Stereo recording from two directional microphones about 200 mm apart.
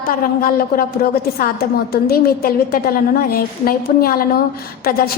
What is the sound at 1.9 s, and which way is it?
A woman's voice, 50° left (ahead or behind).